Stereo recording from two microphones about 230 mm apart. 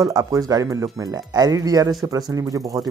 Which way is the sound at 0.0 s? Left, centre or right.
Centre.